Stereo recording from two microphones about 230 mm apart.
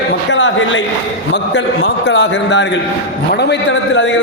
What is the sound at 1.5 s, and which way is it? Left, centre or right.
A man's voice, left.